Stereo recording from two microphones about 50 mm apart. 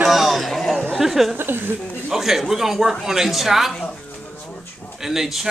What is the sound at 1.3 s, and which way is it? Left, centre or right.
Speech, right.